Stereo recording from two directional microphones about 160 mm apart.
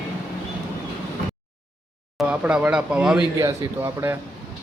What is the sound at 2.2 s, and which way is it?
Speech, 5° right (ahead or behind).